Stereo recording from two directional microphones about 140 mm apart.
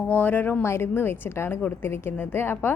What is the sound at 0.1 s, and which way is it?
A woman's voice, 15° left (ahead or behind).